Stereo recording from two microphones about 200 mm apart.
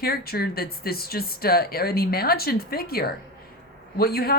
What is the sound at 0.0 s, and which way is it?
Speech, 50° left (ahead or behind).